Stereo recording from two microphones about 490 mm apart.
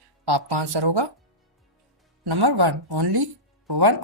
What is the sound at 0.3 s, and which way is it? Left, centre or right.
Speech, right.